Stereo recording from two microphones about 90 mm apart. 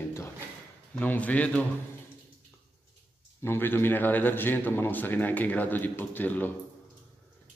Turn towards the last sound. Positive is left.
turn(degrees=20)  # may be behind; listen again after turning